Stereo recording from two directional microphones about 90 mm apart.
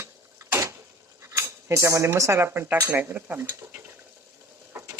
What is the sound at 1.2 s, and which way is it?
Speech, 30° right (ahead or behind).